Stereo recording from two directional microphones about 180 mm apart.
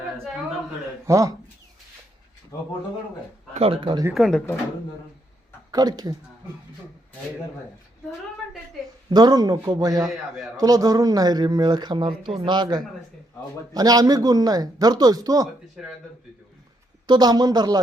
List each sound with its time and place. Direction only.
1.0 s speech: 15° right (ahead or behind)
2.5 s speech: 20° left (ahead or behind)
3.5 s speech: 30° right (ahead or behind)
4.1 s a man's voice: centre (ahead or behind)
5.7 s speech: 20° right (ahead or behind)
9.0 s speech: 20° right (ahead or behind)
10.1 s a man's voice: centre (ahead or behind)
10.6 s speech: 20° right (ahead or behind)
15.7 s a man's voice: centre (ahead or behind)
17.1 s speech: 20° right (ahead or behind)